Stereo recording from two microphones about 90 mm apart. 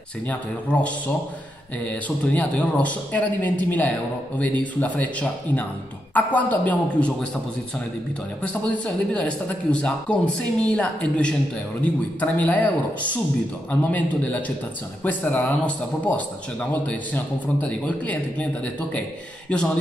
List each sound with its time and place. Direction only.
0.3 s speech: 15° left (ahead or behind)
8.4 s speech: 15° left (ahead or behind)